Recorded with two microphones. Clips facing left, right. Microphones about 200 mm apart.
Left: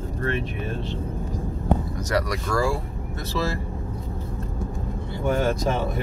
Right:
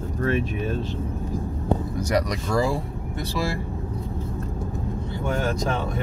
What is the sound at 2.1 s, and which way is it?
Speech, 20° right (ahead or behind).